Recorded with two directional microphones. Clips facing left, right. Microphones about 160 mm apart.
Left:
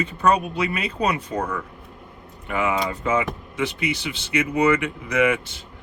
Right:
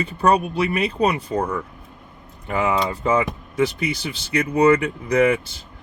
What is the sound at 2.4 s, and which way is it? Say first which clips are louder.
Speech: right 2 dB; 35° right (ahead or behind).